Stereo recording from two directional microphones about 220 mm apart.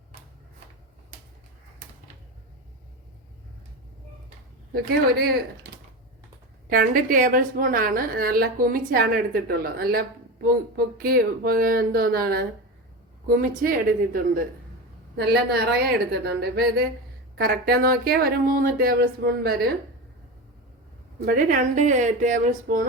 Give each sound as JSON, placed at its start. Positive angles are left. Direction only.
{"t": 4.7, "sound": "speech", "side_deg": -45}
{"t": 6.7, "sound": "a woman's voice", "side_deg": -40}
{"t": 21.2, "sound": "a woman's voice", "side_deg": -35}